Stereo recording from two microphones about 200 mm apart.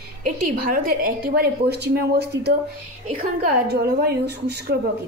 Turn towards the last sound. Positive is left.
turn(degrees=-55)  # may be behind; listen again after turning